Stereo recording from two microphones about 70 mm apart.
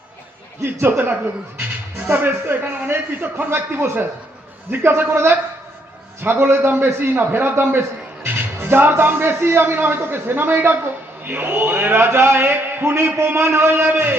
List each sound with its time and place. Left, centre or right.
0.6 s a man's voice: right